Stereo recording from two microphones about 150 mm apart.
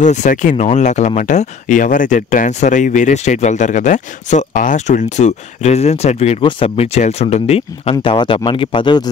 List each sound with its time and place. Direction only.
0.0 s speech: 55° left (ahead or behind); by 9.1 s 30° left (ahead or behind)